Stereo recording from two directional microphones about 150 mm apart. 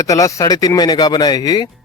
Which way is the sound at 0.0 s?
20° left (ahead or behind).